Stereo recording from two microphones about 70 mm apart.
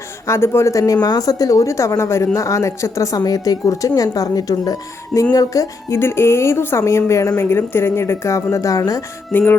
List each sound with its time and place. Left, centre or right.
0.3 s a woman's voice: left
1.0 s a woman's voice: left
3.2 s a woman's voice: left
5.9 s a woman's voice: left
7.5 s a woman's voice: left